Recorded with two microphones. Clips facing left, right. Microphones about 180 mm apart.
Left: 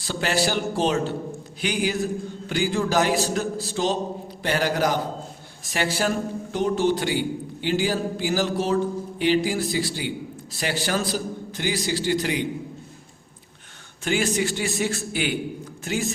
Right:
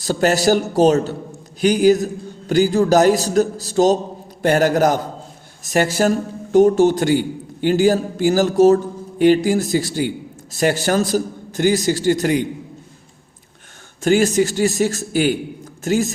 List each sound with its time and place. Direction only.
0.0 s a man's voice: 45° right (ahead or behind)
14.0 s a man's voice: 45° right (ahead or behind)